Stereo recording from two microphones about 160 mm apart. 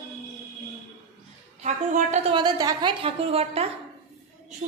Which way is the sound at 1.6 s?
45° right (ahead or behind).